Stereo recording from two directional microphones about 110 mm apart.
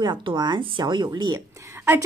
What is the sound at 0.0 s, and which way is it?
A woman's voice, 45° right (ahead or behind).